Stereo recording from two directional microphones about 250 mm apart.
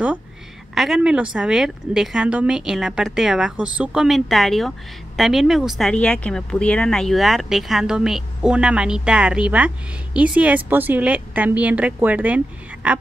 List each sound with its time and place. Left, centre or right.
0.7 s a woman's voice: centre